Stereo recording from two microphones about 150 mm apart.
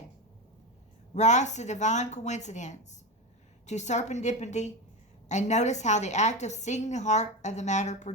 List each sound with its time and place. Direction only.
1.1 s a woman's voice: 50° left (ahead or behind)